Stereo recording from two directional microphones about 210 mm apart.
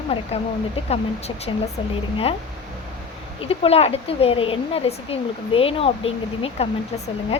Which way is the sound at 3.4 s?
30° left (ahead or behind).